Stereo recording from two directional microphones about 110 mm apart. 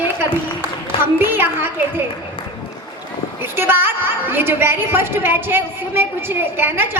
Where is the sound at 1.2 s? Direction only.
20° right (ahead or behind).